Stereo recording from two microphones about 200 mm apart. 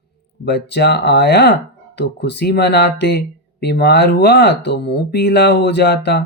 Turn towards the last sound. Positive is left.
turn(degrees=60)  # may be behind; listen again after turning